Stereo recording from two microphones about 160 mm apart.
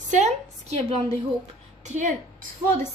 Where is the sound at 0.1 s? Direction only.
45° right (ahead or behind).